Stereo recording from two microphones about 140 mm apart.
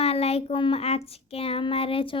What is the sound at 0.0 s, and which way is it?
Child singing, 45° left (ahead or behind).